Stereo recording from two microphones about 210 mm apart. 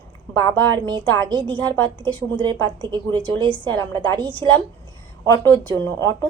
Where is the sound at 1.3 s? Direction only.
20° right (ahead or behind).